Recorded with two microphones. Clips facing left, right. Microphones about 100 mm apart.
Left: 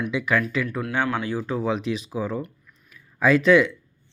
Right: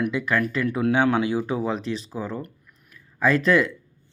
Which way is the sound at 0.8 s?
20° right (ahead or behind).